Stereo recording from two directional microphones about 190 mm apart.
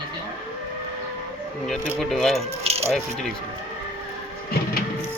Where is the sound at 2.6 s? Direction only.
30° right (ahead or behind).